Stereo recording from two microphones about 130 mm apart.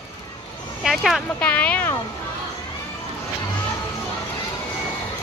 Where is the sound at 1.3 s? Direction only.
10° left (ahead or behind).